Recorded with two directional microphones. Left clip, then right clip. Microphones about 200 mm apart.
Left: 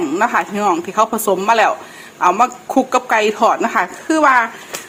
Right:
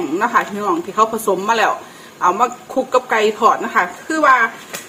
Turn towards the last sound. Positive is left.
turn(degrees=40)  # may be behind; listen again after turning